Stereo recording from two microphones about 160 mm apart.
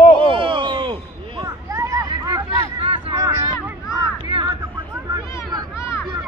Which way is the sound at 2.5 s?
35° right (ahead or behind).